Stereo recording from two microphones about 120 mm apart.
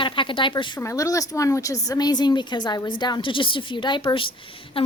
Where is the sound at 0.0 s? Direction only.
45° left (ahead or behind).